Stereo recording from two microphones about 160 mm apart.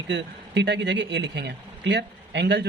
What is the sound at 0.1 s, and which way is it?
Speech, 90° right.